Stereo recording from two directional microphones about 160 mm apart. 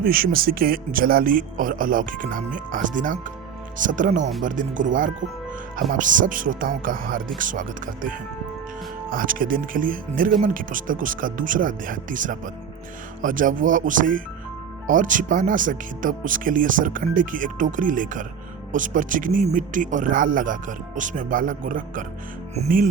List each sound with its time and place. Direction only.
0.0 s speech: 65° right (ahead or behind)